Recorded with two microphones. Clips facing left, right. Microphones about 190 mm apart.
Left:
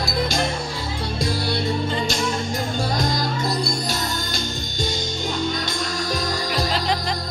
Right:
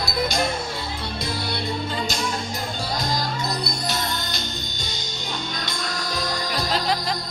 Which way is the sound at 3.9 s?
45° left (ahead or behind).